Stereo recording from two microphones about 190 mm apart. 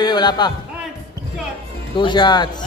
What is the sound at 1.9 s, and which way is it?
Mantra, 25° left (ahead or behind).